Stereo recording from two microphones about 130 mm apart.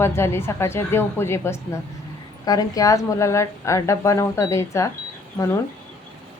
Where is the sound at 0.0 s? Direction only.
20° left (ahead or behind).